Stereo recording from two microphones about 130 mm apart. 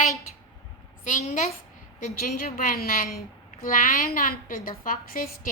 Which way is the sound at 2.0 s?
90° left.